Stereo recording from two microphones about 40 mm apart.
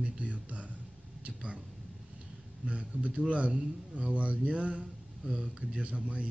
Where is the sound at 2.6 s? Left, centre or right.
Right.